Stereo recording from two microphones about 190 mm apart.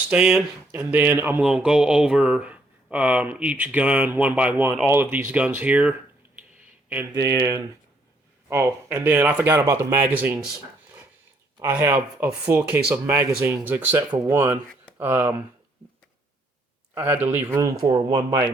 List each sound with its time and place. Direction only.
0.1 s speech: 5° right (ahead or behind)
11.6 s speech: 10° right (ahead or behind)
16.9 s speech: 10° right (ahead or behind)